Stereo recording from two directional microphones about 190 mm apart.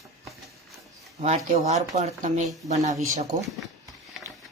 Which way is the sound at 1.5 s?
35° right (ahead or behind).